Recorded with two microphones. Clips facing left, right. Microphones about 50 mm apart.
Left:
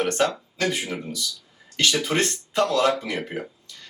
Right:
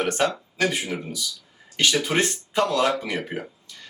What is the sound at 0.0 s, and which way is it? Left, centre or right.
Speech, centre.